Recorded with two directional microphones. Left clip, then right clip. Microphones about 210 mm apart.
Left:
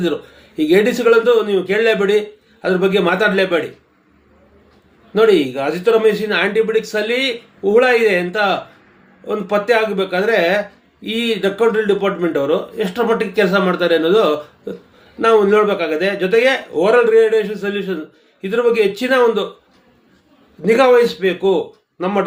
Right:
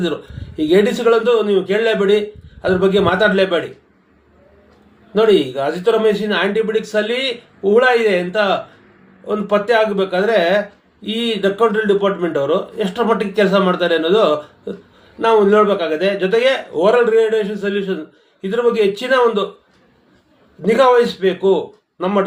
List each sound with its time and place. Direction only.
0.5 s speech: 20° left (ahead or behind)
5.1 s speech: 15° left (ahead or behind)
20.6 s speech: 15° left (ahead or behind)